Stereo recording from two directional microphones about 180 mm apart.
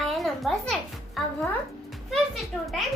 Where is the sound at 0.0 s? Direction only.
Centre (ahead or behind).